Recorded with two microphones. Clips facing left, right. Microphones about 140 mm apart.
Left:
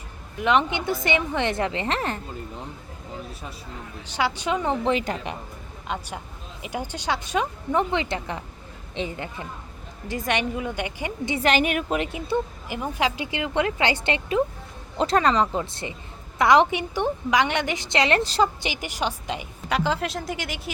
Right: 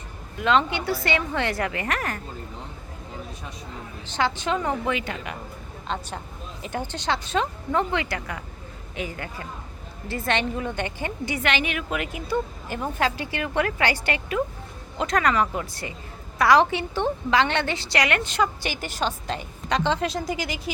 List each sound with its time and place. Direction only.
0.3 s a woman's voice: 20° left (ahead or behind)
4.0 s a woman's voice: 10° left (ahead or behind); by 5.4 s 30° left (ahead or behind)
5.9 s a woman's voice: 10° left (ahead or behind)
11.4 s a woman's voice: 45° left (ahead or behind)
11.9 s a woman's voice: 25° left (ahead or behind)
12.6 s a woman's voice: 10° left (ahead or behind); by 18.4 s 35° left (ahead or behind)
18.6 s a woman's voice: 15° left (ahead or behind)